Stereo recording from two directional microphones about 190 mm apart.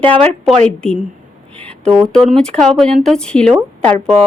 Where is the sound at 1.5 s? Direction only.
5° left (ahead or behind).